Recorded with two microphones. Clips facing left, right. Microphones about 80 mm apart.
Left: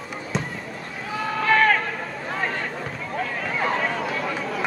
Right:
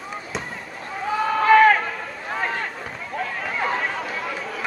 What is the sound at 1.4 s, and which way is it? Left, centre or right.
Run, centre.